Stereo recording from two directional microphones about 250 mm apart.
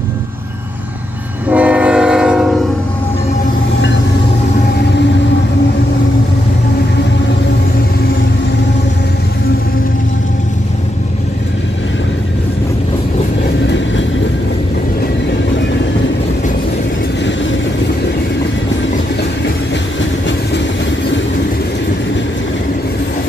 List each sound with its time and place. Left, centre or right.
1.5 s train: centre
13.7 s vehicle: left